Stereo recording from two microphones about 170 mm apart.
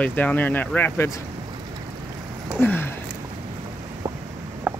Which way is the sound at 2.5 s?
10° left (ahead or behind).